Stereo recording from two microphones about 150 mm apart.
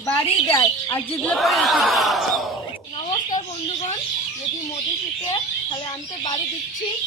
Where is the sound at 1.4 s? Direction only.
Centre (ahead or behind).